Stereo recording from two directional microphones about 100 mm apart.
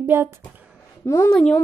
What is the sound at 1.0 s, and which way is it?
Speech, 30° left (ahead or behind).